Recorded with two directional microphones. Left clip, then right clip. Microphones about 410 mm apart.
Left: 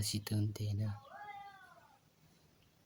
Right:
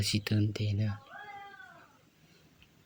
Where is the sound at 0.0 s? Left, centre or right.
Right.